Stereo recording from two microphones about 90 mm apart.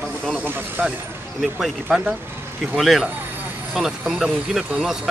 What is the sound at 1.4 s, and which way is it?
Speech, 5° right (ahead or behind).